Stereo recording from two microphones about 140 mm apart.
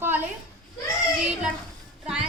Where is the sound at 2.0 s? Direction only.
5° right (ahead or behind).